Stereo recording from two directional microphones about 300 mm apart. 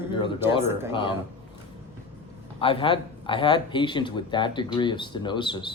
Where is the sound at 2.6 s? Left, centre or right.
Centre.